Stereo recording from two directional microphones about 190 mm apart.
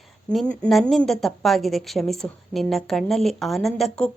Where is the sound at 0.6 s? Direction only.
Centre (ahead or behind).